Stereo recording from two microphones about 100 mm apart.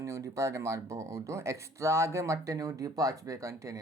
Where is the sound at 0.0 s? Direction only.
30° right (ahead or behind).